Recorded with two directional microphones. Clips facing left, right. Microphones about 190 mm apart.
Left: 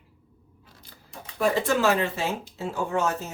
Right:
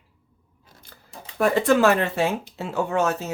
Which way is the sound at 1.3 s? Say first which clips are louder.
Right 4 dB; 55° right (ahead or behind).